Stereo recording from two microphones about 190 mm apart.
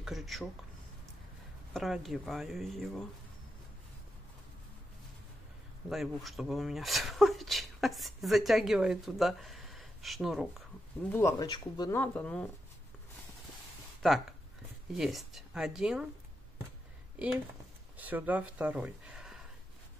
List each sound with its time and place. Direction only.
0.0 s speech: centre (ahead or behind)
1.7 s speech: centre (ahead or behind)
5.9 s speech: centre (ahead or behind)
11.1 s speech: 10° left (ahead or behind)
11.9 s speech: 5° left (ahead or behind)
14.0 s speech: 5° left (ahead or behind)
17.9 s speech: 10° right (ahead or behind)